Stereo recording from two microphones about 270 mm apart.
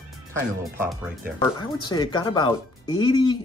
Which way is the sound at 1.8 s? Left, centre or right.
Centre.